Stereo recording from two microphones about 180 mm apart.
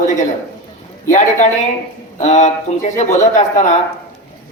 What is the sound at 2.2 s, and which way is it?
Speech, 40° left (ahead or behind).